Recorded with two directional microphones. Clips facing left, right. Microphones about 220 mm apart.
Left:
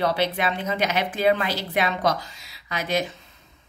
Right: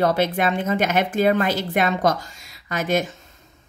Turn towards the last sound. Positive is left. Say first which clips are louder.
# right 4 dB
turn(degrees=-45)  # may be behind; listen again after turning